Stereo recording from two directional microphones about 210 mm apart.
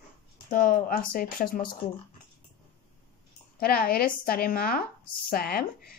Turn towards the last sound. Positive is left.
turn(degrees=45)  # may be behind; listen again after turning